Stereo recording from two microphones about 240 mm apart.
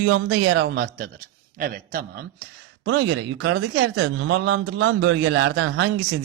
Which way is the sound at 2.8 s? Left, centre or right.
Right.